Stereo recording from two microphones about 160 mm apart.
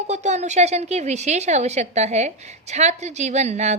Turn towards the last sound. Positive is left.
turn(degrees=-45)  # may be behind; listen again after turning